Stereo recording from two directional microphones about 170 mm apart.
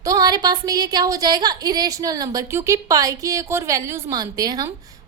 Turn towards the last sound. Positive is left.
turn(degrees=-20)  # may be behind; listen again after turning